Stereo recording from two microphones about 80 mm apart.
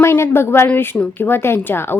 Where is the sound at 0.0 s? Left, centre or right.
Left.